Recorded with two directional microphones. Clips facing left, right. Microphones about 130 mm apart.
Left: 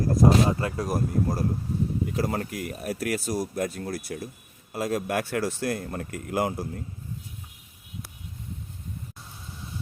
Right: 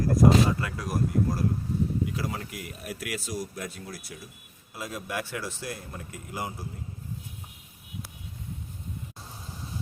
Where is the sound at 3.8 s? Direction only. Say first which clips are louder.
Left 9 dB; 60° left (ahead or behind).